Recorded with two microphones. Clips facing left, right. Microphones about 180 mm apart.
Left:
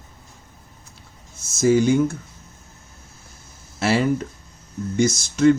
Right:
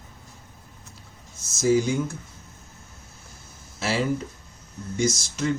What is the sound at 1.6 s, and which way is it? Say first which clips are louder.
Speech: left 5 dB; 60° left (ahead or behind).